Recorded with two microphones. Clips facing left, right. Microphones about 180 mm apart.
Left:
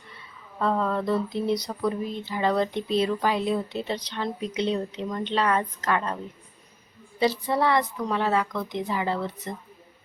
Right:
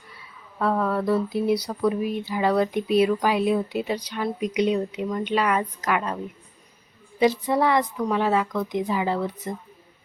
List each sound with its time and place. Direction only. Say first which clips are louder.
0.6 s speech: right 2 dB; 5° right (ahead or behind)
7.2 s speech: right 3 dB; 15° right (ahead or behind)